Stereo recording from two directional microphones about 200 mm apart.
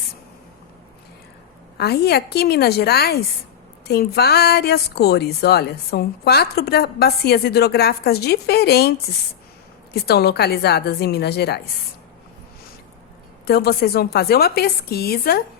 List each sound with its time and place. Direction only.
1.8 s a woman's voice: 55° left (ahead or behind)
9.9 s a woman's voice: 55° left (ahead or behind)
13.5 s a woman's voice: 50° left (ahead or behind)